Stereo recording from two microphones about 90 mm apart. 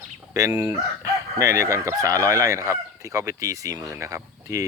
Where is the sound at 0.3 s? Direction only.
40° right (ahead or behind).